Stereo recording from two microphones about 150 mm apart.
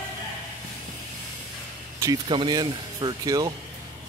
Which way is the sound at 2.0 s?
30° right (ahead or behind).